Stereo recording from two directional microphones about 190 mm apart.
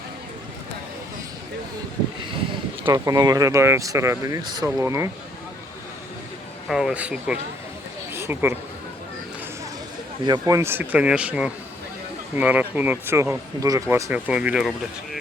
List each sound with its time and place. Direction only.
2.8 s speech: 15° right (ahead or behind)
6.7 s speech: 5° right (ahead or behind)
8.1 s a sound: 10° right (ahead or behind)
10.2 s speech: 20° right (ahead or behind)